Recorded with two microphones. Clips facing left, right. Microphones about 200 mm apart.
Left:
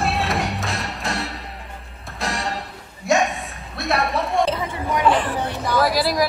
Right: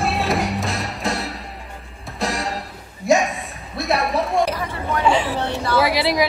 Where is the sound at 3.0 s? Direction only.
Centre (ahead or behind).